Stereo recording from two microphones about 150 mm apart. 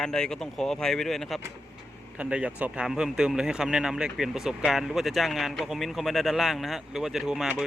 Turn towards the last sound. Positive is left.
turn(degrees=-5)  # may be behind; listen again after turning